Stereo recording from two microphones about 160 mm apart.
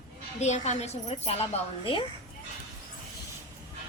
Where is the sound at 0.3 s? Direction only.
45° left (ahead or behind).